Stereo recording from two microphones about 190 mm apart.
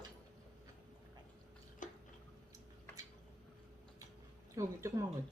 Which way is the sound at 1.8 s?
40° left (ahead or behind).